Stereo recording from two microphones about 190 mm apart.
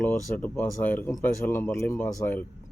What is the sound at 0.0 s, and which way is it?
Speech, 10° left (ahead or behind).